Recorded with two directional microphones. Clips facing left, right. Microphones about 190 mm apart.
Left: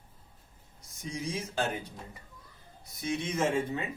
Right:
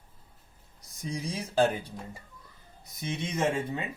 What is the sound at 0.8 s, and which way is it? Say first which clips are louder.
Speech: right 2 dB; 35° right (ahead or behind).